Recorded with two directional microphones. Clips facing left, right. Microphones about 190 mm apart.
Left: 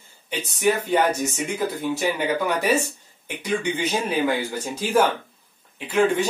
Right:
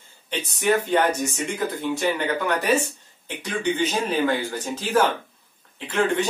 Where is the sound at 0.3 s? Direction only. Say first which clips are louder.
Even; 10° left (ahead or behind).